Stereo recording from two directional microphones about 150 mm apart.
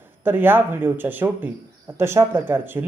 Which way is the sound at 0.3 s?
15° right (ahead or behind).